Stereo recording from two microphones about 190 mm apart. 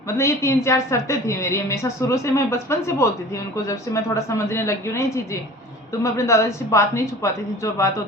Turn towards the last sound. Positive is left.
turn(degrees=15)  # may be behind; listen again after turning